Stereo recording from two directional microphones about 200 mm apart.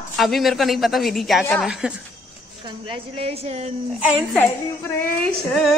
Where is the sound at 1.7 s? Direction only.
5° right (ahead or behind).